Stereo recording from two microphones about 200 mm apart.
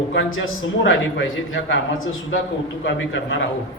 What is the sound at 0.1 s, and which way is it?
A man's voice, 75° left (ahead or behind).